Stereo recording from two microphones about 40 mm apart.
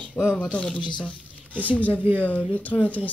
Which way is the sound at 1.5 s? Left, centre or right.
Left.